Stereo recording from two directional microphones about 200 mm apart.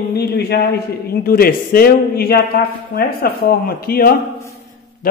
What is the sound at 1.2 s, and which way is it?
A man's voice, 50° left (ahead or behind).